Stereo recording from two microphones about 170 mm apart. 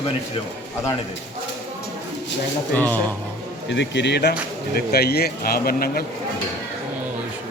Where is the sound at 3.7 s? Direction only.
90° left; by 6.1 s 60° left (ahead or behind).